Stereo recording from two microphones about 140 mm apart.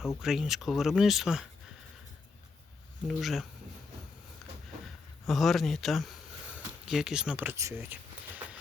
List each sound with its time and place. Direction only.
0.2 s speech: 5° right (ahead or behind)
3.1 s speech: centre (ahead or behind)
5.2 s speech: centre (ahead or behind)
7.5 s speech: 20° right (ahead or behind)